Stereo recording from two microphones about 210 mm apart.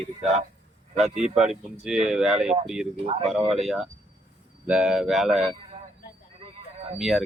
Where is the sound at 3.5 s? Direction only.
Centre (ahead or behind).